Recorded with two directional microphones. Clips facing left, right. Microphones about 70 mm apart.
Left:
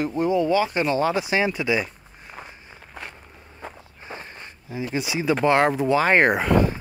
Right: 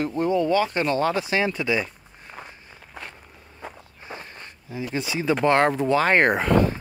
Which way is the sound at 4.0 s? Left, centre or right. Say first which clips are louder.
Left 1 dB; left.